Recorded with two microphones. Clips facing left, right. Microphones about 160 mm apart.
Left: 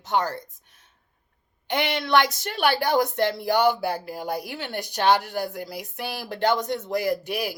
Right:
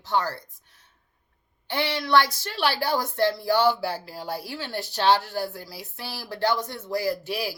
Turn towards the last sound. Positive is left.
turn(degrees=20)  # may be behind; listen again after turning